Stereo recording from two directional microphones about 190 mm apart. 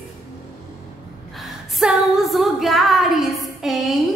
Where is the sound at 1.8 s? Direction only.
Centre (ahead or behind).